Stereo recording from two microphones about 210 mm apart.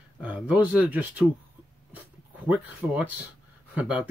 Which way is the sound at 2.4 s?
5° right (ahead or behind).